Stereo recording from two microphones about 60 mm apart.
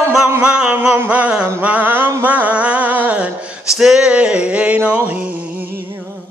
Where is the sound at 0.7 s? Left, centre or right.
Right.